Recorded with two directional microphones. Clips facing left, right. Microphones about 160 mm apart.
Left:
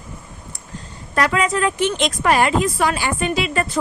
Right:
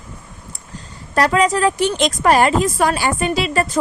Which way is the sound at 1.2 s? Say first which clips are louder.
Right 3 dB; 35° right (ahead or behind).